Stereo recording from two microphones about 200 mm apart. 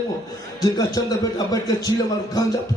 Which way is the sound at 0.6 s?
15° left (ahead or behind).